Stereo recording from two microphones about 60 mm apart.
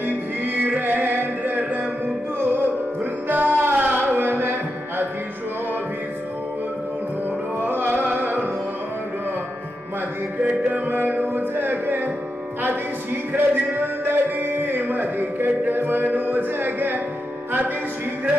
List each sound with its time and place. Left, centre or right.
0.7 s music: right
7.6 s music: right
10.7 s music: right
13.4 s music: right